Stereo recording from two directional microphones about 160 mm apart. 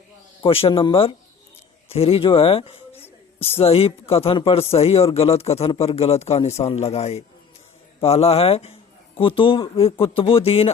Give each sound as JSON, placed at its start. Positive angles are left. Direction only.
{"t": 0.4, "sound": "a man's voice", "side_deg": 35}
{"t": 2.9, "sound": "a sound", "side_deg": 15}
{"t": 3.6, "sound": "a man's voice", "side_deg": 40}